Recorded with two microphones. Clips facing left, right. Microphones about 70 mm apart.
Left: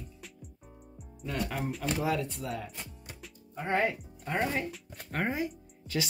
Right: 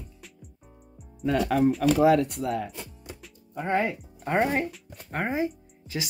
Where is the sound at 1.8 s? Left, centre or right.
Right.